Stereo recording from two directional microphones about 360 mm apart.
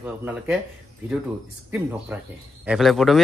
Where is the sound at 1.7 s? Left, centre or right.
Centre.